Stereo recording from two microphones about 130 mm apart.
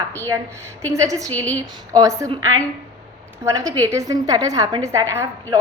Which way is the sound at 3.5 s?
25° right (ahead or behind).